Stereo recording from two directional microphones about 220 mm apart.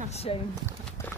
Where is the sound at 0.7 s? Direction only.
10° left (ahead or behind).